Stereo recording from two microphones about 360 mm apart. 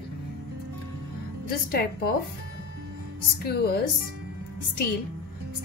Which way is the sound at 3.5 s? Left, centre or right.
Left.